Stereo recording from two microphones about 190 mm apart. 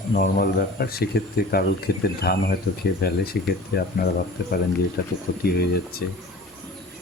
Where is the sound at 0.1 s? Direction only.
50° left (ahead or behind).